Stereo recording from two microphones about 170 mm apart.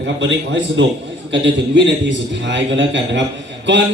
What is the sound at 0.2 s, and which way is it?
Speech, 90° right.